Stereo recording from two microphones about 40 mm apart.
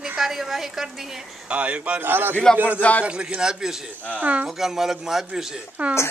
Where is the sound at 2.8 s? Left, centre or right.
Left.